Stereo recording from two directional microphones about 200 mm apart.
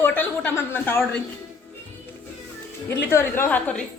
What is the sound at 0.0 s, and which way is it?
Speech, 10° left (ahead or behind).